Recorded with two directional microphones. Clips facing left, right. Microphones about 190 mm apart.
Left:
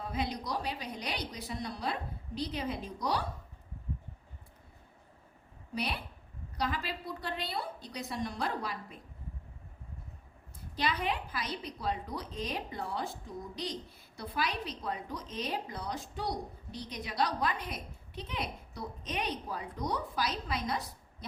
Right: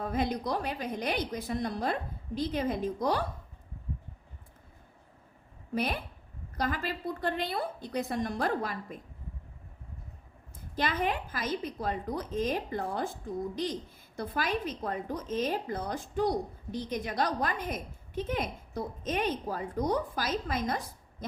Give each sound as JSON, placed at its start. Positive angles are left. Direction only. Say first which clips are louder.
{"t": 0.0, "sound": "a woman's voice", "louder": "right 5 dB", "side_deg": -50}
{"t": 5.7, "sound": "a woman's voice", "louder": "right 5 dB", "side_deg": -45}
{"t": 10.8, "sound": "a woman's voice", "louder": "right 3 dB", "side_deg": -50}